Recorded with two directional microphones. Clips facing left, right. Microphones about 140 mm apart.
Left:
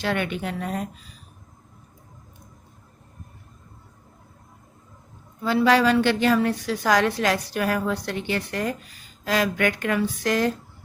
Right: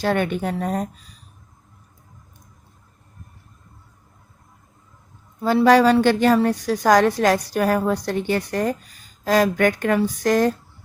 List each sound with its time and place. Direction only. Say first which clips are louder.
0.0 s a woman's voice: right 5 dB; 45° right (ahead or behind)
5.4 s a woman's voice: right 4 dB; 40° right (ahead or behind)